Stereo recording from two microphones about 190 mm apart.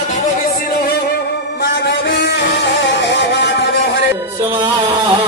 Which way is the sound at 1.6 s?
70° left (ahead or behind).